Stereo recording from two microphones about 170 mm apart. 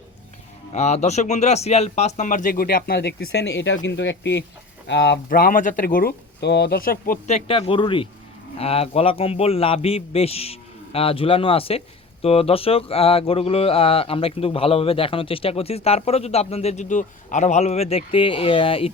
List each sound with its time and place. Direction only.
0.7 s a man's voice: 40° left (ahead or behind); by 7.2 s 55° left (ahead or behind)
7.3 s speech: 35° left (ahead or behind)